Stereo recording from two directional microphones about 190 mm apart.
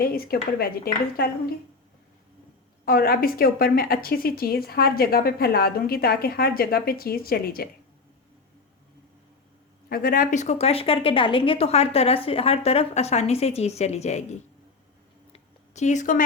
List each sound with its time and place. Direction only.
0.0 s a woman's voice: 50° left (ahead or behind)
2.8 s a woman's voice: 55° left (ahead or behind)
9.9 s a woman's voice: 50° left (ahead or behind)
15.3 s a sound: 35° left (ahead or behind)